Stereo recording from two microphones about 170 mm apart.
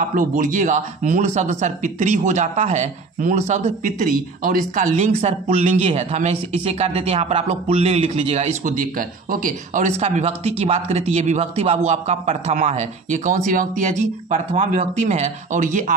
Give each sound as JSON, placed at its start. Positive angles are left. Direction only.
{"t": 0.1, "sound": "speech", "side_deg": -50}
{"t": 8.6, "sound": "speech", "side_deg": -55}